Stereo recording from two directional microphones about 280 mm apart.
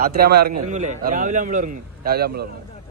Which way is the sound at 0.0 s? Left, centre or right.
Right.